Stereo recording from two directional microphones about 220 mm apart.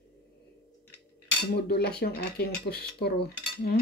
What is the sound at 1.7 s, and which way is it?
Cutlery, 50° left (ahead or behind).